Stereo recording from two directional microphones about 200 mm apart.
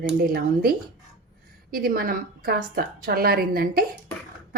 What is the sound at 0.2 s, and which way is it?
A woman's voice, 50° right (ahead or behind).